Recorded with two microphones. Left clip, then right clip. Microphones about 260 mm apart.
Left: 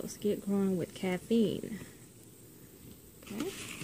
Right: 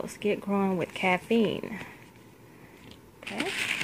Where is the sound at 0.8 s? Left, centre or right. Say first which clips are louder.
Right 9 dB; right.